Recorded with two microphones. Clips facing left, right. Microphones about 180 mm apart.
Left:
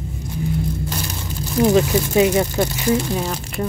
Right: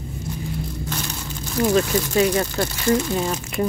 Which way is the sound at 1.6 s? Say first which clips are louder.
Left 3 dB; 20° left (ahead or behind).